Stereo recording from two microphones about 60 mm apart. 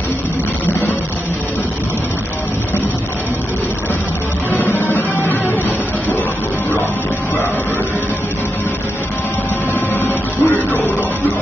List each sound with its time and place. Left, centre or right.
4.5 s music: left
10.0 s music: left